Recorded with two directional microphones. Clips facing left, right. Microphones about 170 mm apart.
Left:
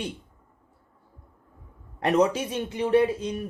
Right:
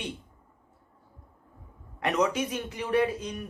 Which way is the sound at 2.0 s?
30° left (ahead or behind).